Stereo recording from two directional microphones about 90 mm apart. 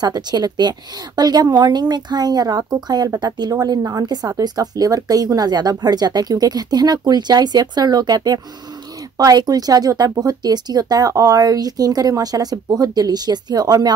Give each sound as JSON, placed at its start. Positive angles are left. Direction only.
{"t": 0.0, "sound": "a woman's voice", "side_deg": -50}